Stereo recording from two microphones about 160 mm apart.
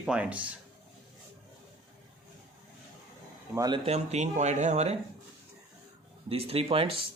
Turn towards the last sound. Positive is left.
turn(degrees=-35)  # may be behind; listen again after turning